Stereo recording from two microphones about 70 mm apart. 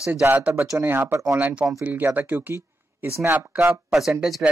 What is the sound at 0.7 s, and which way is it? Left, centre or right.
Speech, right.